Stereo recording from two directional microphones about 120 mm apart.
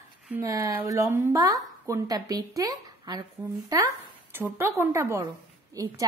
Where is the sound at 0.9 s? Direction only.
25° right (ahead or behind).